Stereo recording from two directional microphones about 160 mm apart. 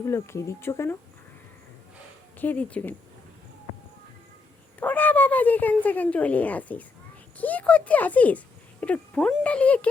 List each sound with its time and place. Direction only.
0.0 s speech: 20° left (ahead or behind)
2.4 s speech: 10° left (ahead or behind)
4.8 s speech: 10° left (ahead or behind)